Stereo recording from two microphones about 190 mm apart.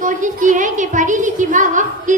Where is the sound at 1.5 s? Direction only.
40° right (ahead or behind).